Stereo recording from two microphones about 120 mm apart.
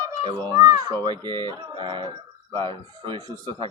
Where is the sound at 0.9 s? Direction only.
35° right (ahead or behind).